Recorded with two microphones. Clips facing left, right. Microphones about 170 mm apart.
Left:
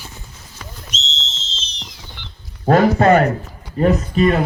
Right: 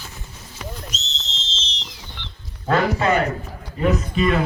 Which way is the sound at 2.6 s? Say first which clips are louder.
Left 7 dB; 45° left (ahead or behind).